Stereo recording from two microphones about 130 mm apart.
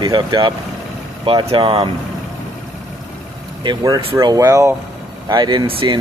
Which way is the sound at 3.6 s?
35° right (ahead or behind).